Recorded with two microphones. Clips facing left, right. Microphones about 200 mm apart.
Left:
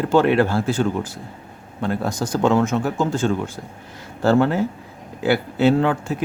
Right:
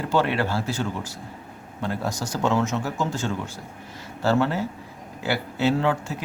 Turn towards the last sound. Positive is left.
turn(degrees=55)  # may be behind; listen again after turning